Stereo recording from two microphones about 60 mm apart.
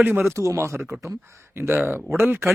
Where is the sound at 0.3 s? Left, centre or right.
Right.